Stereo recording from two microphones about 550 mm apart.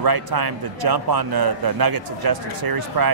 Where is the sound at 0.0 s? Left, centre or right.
Right.